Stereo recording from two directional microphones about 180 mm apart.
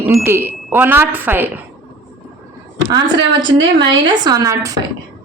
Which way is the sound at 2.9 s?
20° right (ahead or behind).